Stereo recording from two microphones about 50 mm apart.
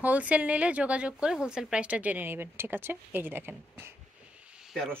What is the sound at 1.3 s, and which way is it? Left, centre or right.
Speech, centre.